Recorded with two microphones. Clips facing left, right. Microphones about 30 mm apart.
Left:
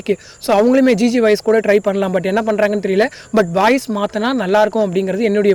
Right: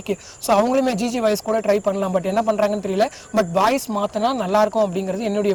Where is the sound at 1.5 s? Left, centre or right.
Left.